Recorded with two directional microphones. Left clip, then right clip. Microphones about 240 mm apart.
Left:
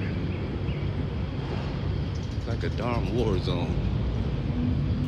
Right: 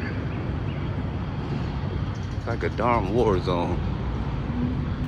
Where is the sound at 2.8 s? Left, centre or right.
Right.